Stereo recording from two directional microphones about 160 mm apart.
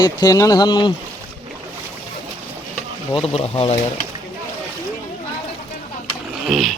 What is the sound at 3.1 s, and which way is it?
Speech, 35° left (ahead or behind).